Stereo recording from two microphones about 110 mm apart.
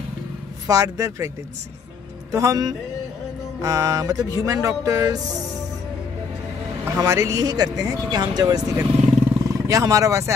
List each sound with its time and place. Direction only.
0.7 s speech: 35° right (ahead or behind)
2.3 s speech: 35° right (ahead or behind)
6.8 s speech: 25° right (ahead or behind)